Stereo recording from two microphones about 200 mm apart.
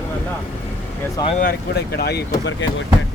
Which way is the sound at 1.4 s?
50° left (ahead or behind).